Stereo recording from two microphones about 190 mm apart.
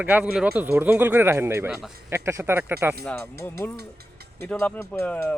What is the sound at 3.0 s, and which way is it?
Speech, 10° left (ahead or behind).